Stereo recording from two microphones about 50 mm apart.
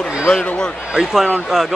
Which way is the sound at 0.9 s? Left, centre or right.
Centre.